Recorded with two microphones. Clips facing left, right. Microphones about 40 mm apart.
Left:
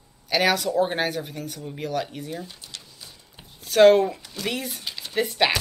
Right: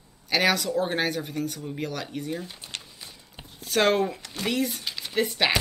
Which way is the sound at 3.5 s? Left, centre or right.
Centre.